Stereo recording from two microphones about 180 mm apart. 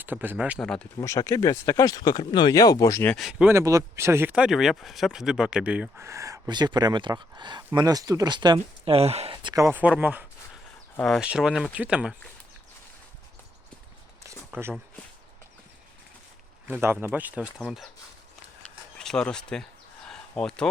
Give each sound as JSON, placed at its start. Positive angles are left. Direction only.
{"t": 0.0, "sound": "speech", "side_deg": -10}
{"t": 0.6, "sound": "speech", "side_deg": 5}
{"t": 1.0, "sound": "speech", "side_deg": 15}
{"t": 3.2, "sound": "speech", "side_deg": -5}
{"t": 3.5, "sound": "speech", "side_deg": -20}
{"t": 9.6, "sound": "speech", "side_deg": -10}
{"t": 10.9, "sound": "speech", "side_deg": 0}
{"t": 14.5, "sound": "speech", "side_deg": -15}
{"t": 16.6, "sound": "speech", "side_deg": -10}
{"t": 18.9, "sound": "speech", "side_deg": 5}
{"t": 20.1, "sound": "a sound", "side_deg": 5}